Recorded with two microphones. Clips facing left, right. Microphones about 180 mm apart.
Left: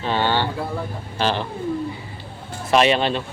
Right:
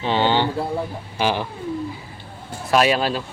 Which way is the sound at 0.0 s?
15° right (ahead or behind).